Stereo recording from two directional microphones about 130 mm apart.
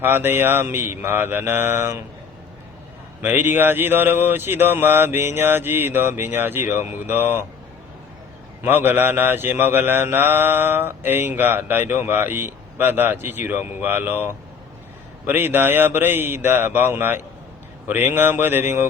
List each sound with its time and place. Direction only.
0.0 s mantra: 15° right (ahead or behind)
3.2 s mantra: 15° right (ahead or behind)
8.6 s mantra: 15° right (ahead or behind)